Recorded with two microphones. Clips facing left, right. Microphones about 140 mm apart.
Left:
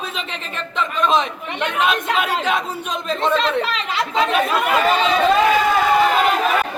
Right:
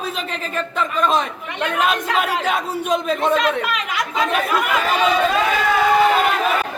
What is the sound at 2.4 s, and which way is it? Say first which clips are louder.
Speech: right 2 dB; 10° right (ahead or behind).